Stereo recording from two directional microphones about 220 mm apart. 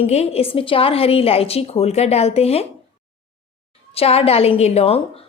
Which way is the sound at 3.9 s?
25° left (ahead or behind).